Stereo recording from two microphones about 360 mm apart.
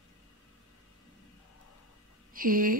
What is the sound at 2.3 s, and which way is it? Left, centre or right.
Speech, right.